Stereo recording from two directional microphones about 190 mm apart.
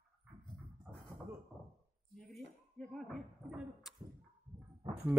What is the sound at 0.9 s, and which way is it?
Beatboxing, centre (ahead or behind).